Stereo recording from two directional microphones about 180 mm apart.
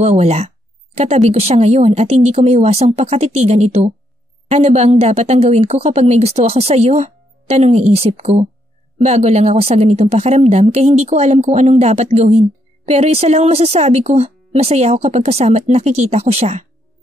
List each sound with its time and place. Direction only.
0.0 s speech: 40° right (ahead or behind)